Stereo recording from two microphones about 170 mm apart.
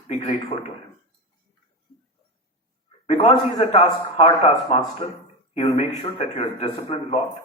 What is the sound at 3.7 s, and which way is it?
Speech, 35° left (ahead or behind).